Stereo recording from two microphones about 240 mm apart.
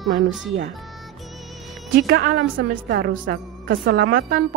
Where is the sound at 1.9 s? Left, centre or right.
Right.